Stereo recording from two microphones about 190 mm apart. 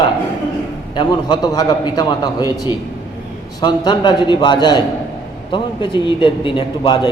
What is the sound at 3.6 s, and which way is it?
A man's voice, 20° left (ahead or behind).